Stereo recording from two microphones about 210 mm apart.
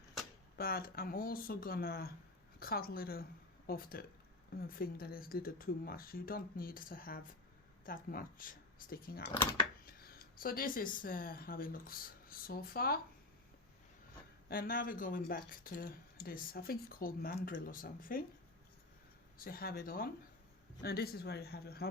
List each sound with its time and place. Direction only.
0.5 s speech: 45° left (ahead or behind)
14.5 s speech: 45° left (ahead or behind)
19.5 s speech: 45° left (ahead or behind)